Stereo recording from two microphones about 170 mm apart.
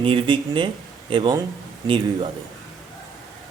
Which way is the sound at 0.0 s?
30° right (ahead or behind).